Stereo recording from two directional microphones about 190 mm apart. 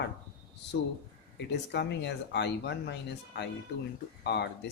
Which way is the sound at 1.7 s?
65° left (ahead or behind).